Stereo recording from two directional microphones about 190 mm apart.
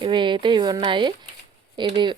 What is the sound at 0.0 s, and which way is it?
Speech, 25° right (ahead or behind).